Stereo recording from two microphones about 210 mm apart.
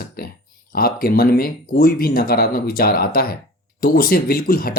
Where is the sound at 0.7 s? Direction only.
45° left (ahead or behind).